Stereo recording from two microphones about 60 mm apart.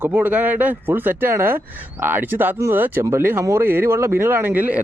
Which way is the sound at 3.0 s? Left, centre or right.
Right.